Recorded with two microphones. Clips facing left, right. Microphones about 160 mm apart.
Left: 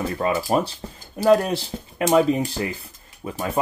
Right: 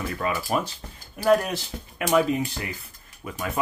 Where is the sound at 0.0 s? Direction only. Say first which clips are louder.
Left 5 dB; 30° left (ahead or behind).